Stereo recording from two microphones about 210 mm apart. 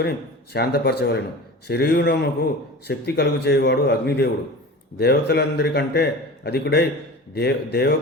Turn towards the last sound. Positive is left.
turn(degrees=50)  # may be behind; listen again after turning